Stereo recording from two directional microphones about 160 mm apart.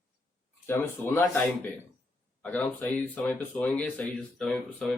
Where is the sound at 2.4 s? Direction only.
5° left (ahead or behind).